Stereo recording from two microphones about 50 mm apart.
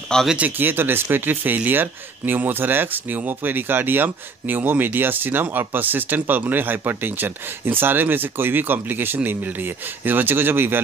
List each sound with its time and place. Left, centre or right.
0.4 s speech: right